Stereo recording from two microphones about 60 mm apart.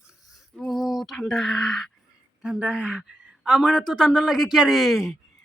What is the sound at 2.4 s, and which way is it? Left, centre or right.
Speech, centre.